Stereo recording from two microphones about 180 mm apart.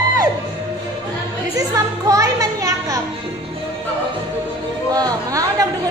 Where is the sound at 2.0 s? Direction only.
20° right (ahead or behind).